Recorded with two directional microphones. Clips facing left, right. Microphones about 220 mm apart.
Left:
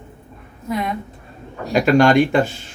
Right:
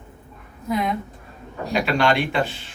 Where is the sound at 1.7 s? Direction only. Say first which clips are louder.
Left 7 dB; 45° left (ahead or behind).